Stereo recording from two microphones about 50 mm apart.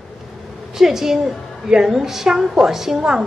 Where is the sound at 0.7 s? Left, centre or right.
Centre.